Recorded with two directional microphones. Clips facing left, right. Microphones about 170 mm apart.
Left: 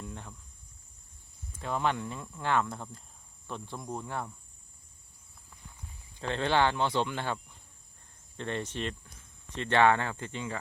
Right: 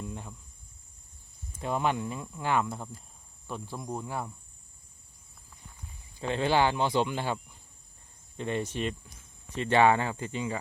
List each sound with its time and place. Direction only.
0.0 s cricket: 10° right (ahead or behind)
1.5 s speech: 15° right (ahead or behind)
6.1 s speech: 10° right (ahead or behind)
8.4 s speech: 10° right (ahead or behind)